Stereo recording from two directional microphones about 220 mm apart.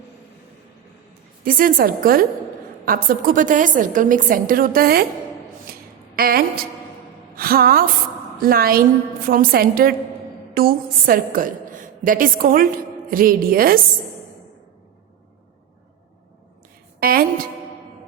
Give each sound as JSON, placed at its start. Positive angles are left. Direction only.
{"t": 1.5, "sound": "a woman's voice", "side_deg": -40}
{"t": 6.1, "sound": "a woman's voice", "side_deg": -45}
{"t": 17.0, "sound": "a woman's voice", "side_deg": -40}